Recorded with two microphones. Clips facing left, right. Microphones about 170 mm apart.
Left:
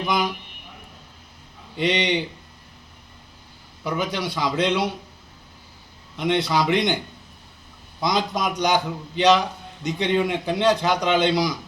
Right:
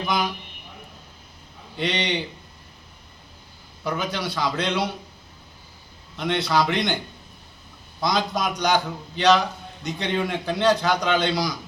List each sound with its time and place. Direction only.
1.7 s a man's voice: 20° left (ahead or behind)
3.8 s a man's voice: 15° left (ahead or behind)
6.1 s a man's voice: 15° left (ahead or behind)
8.0 s a man's voice: 20° left (ahead or behind)